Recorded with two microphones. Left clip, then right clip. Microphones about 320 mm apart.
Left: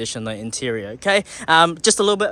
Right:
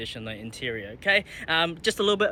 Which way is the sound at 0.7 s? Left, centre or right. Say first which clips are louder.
Left 9 dB; left.